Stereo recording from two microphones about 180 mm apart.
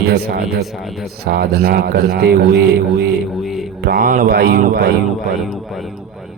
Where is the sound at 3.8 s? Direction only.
55° right (ahead or behind).